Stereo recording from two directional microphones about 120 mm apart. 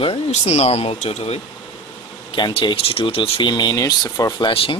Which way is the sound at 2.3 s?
45° left (ahead or behind).